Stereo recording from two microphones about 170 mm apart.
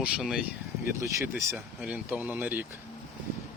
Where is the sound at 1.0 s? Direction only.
15° right (ahead or behind).